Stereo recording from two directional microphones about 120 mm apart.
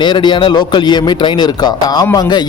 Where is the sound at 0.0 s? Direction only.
40° left (ahead or behind).